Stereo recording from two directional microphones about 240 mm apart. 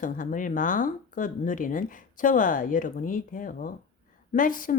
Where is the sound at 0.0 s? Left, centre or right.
Left.